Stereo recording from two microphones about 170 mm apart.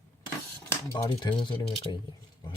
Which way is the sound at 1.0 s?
30° left (ahead or behind).